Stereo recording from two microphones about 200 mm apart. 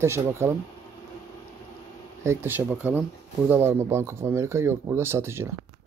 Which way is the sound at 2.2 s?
15° right (ahead or behind).